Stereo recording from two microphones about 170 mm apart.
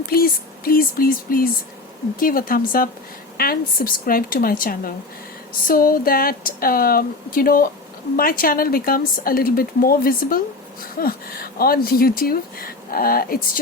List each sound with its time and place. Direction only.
0.1 s speech: 60° left (ahead or behind)